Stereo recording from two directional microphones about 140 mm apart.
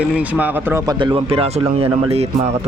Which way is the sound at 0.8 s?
35° right (ahead or behind).